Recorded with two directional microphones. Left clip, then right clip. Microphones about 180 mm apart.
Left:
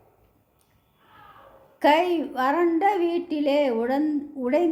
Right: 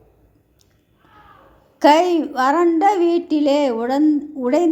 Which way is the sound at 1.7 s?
30° right (ahead or behind).